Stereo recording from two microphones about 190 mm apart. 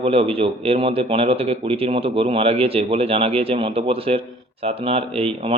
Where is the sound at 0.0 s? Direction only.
30° right (ahead or behind).